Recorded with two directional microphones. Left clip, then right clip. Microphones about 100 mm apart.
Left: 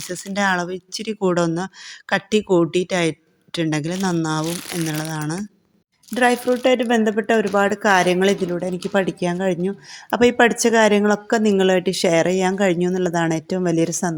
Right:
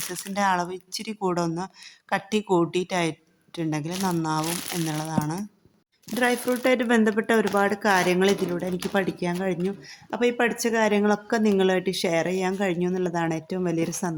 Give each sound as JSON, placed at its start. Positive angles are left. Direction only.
{"t": 0.1, "sound": "a woman's voice", "side_deg": 25}
{"t": 1.3, "sound": "a woman's voice", "side_deg": 40}
{"t": 6.5, "sound": "a woman's voice", "side_deg": 20}
{"t": 10.1, "sound": "speech", "side_deg": 65}
{"t": 11.0, "sound": "speech", "side_deg": 40}